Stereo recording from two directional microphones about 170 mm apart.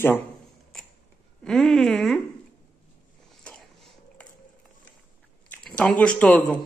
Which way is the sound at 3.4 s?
5° left (ahead or behind).